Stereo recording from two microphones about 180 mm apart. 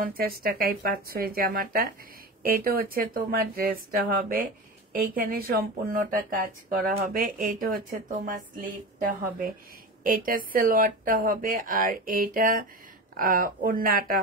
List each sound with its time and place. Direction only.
0.0 s speech: 55° right (ahead or behind)